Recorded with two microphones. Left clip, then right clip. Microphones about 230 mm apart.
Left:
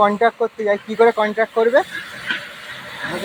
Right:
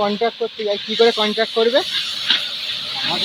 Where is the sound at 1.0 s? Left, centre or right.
Centre.